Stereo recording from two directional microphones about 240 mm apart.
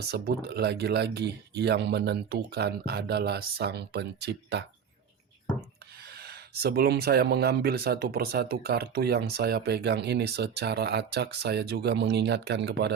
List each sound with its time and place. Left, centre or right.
0.1 s speech: right
6.1 s speech: right